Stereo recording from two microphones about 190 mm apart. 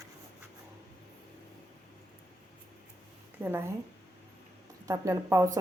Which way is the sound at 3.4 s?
10° right (ahead or behind).